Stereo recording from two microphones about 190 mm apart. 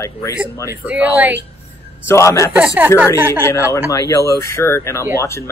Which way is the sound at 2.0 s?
15° left (ahead or behind).